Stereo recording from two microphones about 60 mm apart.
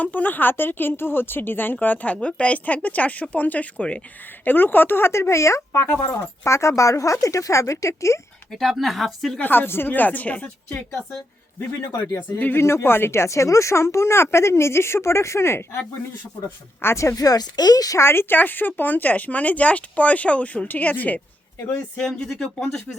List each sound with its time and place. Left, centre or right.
0.0 s a woman's voice: left
4.3 s a woman's voice: left
8.4 s speech: centre
9.4 s speech: left
11.9 s a woman's voice: left
16.8 s a woman's voice: left
17.2 s speech: left
17.9 s speech: left
21.9 s speech: centre